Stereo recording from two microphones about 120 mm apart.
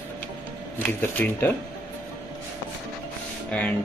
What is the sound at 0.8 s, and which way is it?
Speech, 15° left (ahead or behind).